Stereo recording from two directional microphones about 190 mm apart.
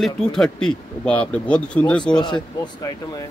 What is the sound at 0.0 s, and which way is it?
Speech, centre (ahead or behind).